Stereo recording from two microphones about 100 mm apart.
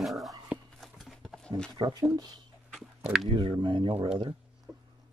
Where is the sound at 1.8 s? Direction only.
55° right (ahead or behind).